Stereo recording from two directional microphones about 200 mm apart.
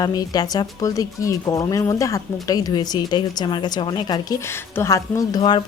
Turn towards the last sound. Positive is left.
turn(degrees=20)  # may be behind; listen again after turning